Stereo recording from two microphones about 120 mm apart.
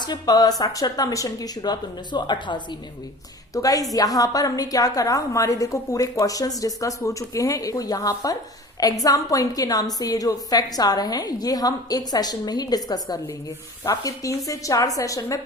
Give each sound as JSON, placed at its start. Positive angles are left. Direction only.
{"t": 0.0, "sound": "a woman's voice", "side_deg": 35}